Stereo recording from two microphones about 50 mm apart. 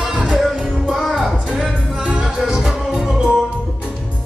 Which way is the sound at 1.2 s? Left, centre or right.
Centre.